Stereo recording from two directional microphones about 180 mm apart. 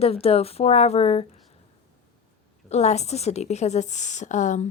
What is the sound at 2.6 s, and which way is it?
A woman's voice, 35° left (ahead or behind).